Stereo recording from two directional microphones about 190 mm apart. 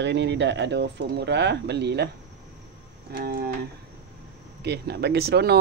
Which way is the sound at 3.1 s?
50° right (ahead or behind).